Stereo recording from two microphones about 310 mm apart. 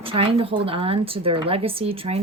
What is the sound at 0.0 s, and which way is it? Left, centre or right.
Speech, centre.